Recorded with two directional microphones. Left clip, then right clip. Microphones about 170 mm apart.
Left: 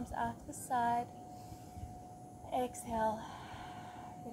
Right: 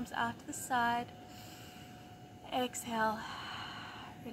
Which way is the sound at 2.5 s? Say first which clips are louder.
Right 1 dB; 20° left (ahead or behind).